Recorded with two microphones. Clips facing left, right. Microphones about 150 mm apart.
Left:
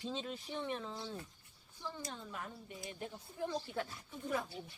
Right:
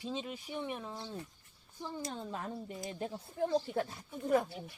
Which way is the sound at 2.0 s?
30° right (ahead or behind).